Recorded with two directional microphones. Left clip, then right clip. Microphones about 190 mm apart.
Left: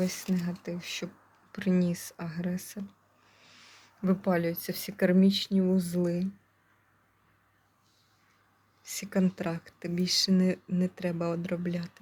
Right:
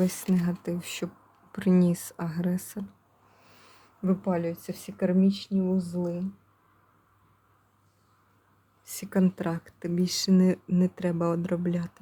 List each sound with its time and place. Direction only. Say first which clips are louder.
0.0 s speech: right 4 dB; 35° right (ahead or behind)
3.4 s a sound: left 2 dB; 25° right (ahead or behind)
4.0 s speech: even; 5° right (ahead or behind); by 6.2 s 15° left (ahead or behind)
8.8 s speech: right 2 dB; 20° right (ahead or behind)